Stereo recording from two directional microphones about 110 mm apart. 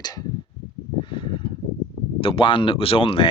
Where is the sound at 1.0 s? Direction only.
50° left (ahead or behind).